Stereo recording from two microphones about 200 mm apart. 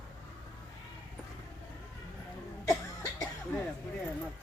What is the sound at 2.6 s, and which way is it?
Cough, 20° left (ahead or behind).